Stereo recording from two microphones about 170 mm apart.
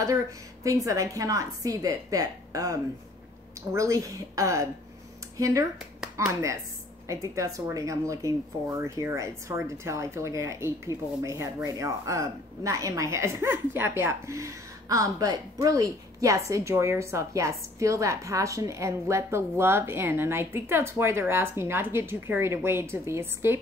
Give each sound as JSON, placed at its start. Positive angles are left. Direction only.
{"t": 0.7, "sound": "a woman's voice", "side_deg": -20}